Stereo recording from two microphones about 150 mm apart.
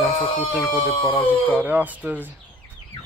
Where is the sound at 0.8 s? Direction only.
30° left (ahead or behind).